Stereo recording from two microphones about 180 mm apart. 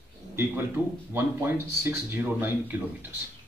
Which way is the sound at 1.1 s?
10° right (ahead or behind).